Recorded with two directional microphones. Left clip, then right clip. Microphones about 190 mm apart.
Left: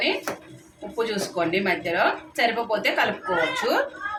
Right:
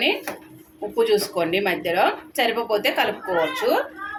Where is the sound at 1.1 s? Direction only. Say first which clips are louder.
Right 4 dB; 30° right (ahead or behind).